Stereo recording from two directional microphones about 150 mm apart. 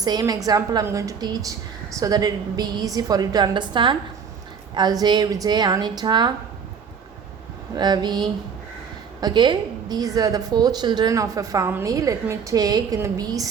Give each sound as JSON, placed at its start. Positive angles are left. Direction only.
{"t": 0.0, "sound": "a woman's voice", "side_deg": -25}
{"t": 7.8, "sound": "a woman's voice", "side_deg": -30}